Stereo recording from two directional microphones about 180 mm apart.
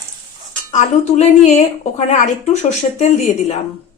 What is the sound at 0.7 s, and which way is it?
A woman's voice, 40° left (ahead or behind).